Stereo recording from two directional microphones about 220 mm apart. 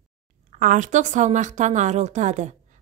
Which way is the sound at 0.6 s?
35° right (ahead or behind).